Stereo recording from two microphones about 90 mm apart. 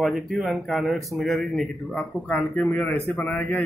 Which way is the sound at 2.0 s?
15° left (ahead or behind).